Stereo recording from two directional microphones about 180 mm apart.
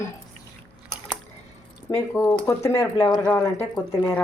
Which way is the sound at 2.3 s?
15° left (ahead or behind).